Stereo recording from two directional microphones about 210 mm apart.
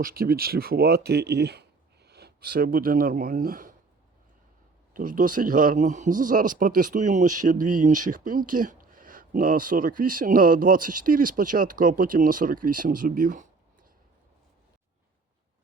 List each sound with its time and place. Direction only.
0.0 s speech: 45° right (ahead or behind)
4.9 s speech: 40° right (ahead or behind)